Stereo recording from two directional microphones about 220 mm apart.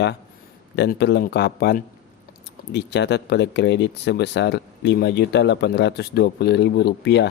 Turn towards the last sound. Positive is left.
turn(degrees=50)  # may be behind; listen again after turning